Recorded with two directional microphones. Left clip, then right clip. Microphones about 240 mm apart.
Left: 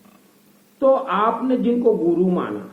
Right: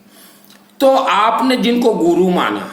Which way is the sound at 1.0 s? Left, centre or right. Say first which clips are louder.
Right 7 dB; right.